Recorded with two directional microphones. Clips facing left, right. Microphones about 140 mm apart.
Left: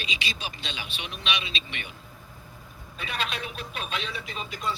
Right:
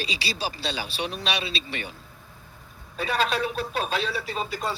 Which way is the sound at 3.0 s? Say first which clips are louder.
Right 8 dB; 35° right (ahead or behind).